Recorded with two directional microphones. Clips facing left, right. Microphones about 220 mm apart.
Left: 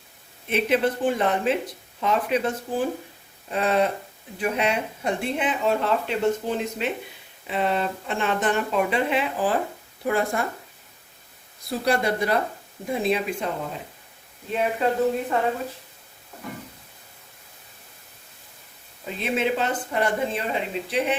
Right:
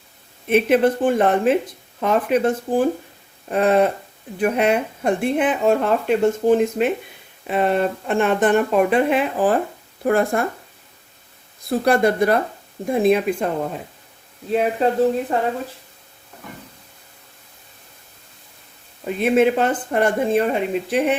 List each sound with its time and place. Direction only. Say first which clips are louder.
0.4 s speech: right 6 dB; 55° right (ahead or behind)
11.7 s speech: right 6 dB; 50° right (ahead or behind)
15.3 s speech: right 3 dB; 30° right (ahead or behind)
19.0 s speech: right 9 dB; 55° right (ahead or behind)